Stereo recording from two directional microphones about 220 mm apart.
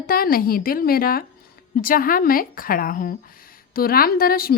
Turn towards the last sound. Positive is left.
turn(degrees=40)  # may be behind; listen again after turning